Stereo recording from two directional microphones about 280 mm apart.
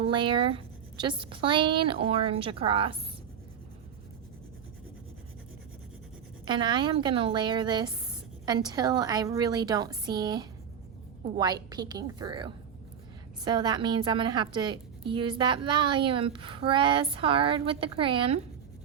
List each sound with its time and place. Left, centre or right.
0.0 s a woman's voice: centre
6.4 s a woman's voice: centre